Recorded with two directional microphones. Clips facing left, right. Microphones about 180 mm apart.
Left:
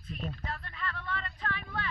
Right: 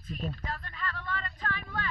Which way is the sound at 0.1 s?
45° right (ahead or behind).